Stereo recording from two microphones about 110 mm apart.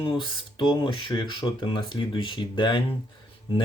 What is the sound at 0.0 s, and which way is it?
Speech, 50° left (ahead or behind).